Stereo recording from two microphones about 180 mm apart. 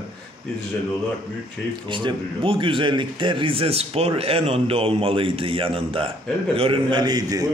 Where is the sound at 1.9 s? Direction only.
25° right (ahead or behind).